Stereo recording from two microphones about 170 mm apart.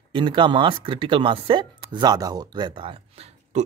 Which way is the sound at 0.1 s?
30° right (ahead or behind).